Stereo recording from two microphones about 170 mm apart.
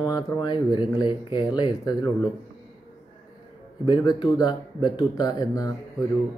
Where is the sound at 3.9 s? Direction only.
25° left (ahead or behind).